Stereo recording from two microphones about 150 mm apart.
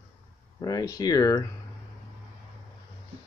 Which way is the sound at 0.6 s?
25° left (ahead or behind).